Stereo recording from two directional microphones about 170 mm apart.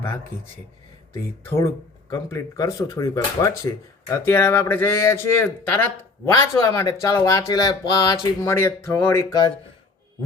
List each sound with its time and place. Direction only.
1.5 s speech: 15° left (ahead or behind)